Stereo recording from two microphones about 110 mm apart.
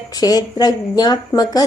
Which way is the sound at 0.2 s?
35° left (ahead or behind).